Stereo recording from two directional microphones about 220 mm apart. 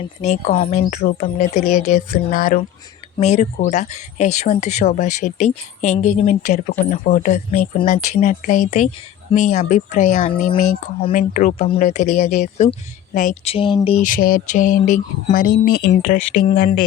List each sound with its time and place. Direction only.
0.0 s speech: 30° left (ahead or behind)